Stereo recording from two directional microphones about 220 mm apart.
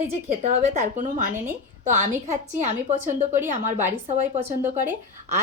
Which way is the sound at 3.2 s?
10° right (ahead or behind).